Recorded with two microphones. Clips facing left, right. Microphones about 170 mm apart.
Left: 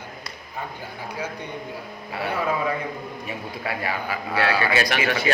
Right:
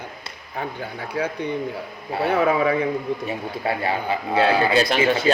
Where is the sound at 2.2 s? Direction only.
70° right (ahead or behind).